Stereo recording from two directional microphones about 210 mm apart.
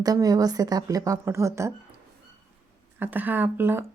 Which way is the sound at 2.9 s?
10° right (ahead or behind).